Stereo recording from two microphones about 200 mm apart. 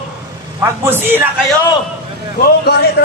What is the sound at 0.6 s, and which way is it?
Speech, 10° right (ahead or behind).